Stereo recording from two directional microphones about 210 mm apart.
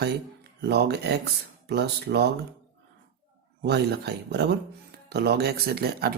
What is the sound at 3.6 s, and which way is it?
Speech, 50° right (ahead or behind).